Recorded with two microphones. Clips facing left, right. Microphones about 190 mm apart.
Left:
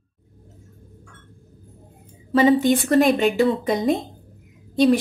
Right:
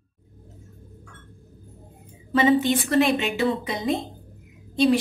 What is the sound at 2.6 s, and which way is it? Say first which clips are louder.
A woman's voice: left 4 dB; 45° left (ahead or behind).